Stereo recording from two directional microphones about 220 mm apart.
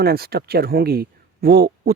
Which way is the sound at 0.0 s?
45° right (ahead or behind).